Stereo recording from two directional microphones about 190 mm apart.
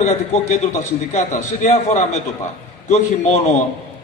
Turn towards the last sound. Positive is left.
turn(degrees=35)  # may be behind; listen again after turning